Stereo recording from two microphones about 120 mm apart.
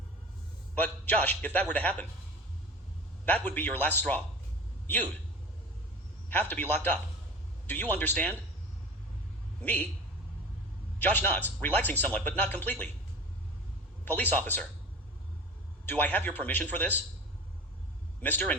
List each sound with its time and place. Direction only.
0.8 s speech: 15° left (ahead or behind)
3.2 s speech: 15° left (ahead or behind)
6.5 s speech: 15° left (ahead or behind)
9.6 s a man's voice: 15° left (ahead or behind)
11.0 s speech: 15° left (ahead or behind)
14.0 s speech: 15° left (ahead or behind)
15.9 s speech: 15° left (ahead or behind)
18.2 s a man's voice: 15° left (ahead or behind)